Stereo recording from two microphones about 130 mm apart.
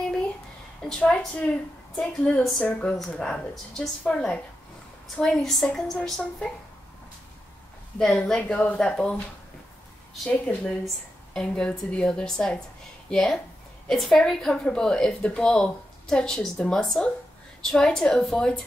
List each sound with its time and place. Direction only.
0.8 s a woman's voice: 5° left (ahead or behind)
8.0 s speech: 5° left (ahead or behind)
10.2 s a woman's voice: 10° left (ahead or behind)